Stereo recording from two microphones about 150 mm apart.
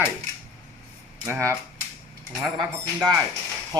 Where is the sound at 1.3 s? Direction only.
20° right (ahead or behind).